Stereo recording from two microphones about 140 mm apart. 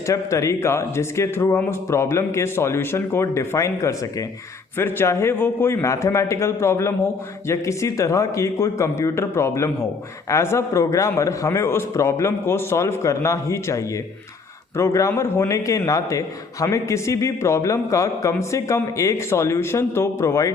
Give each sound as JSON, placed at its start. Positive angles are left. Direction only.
{"t": 0.1, "sound": "a man's voice", "side_deg": 20}